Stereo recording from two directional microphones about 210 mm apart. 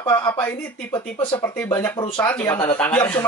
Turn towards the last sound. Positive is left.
turn(degrees=10)  # may be behind; listen again after turning